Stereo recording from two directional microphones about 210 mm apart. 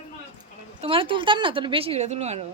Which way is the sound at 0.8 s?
25° right (ahead or behind).